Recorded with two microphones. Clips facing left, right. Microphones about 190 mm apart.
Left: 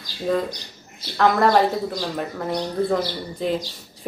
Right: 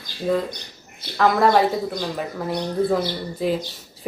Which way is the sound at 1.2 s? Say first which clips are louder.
Even; centre (ahead or behind).